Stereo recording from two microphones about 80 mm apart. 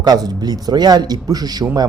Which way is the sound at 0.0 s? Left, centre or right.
Right.